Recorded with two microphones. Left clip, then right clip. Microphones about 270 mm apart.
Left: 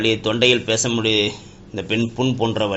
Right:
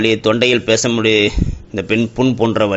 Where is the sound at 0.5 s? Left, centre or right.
Right.